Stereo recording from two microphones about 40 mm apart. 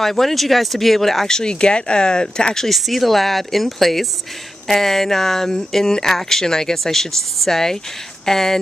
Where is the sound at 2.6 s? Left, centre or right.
Centre.